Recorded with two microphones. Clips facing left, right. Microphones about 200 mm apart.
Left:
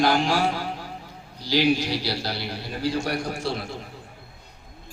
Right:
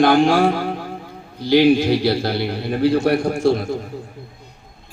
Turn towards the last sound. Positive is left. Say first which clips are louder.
# right 11 dB
turn(degrees=-50)  # may be behind; listen again after turning